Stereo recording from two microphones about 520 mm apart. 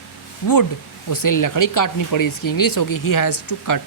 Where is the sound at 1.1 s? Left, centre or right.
Left.